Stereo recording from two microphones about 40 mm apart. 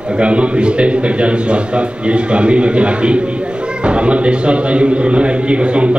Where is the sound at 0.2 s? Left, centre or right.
Right.